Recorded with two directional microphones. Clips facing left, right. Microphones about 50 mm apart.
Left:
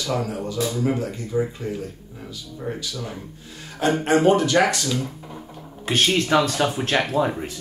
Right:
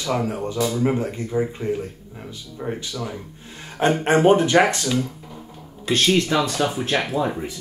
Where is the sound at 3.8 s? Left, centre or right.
Right.